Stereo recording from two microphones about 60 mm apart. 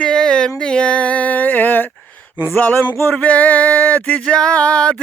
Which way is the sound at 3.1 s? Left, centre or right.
Left.